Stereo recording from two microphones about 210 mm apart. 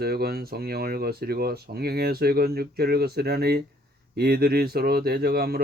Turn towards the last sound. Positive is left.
turn(degrees=-45)  # may be behind; listen again after turning